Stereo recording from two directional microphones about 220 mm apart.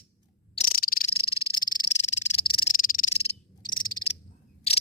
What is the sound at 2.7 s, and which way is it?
Frog, 40° left (ahead or behind).